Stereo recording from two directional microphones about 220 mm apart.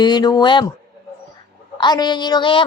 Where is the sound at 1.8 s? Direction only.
20° left (ahead or behind).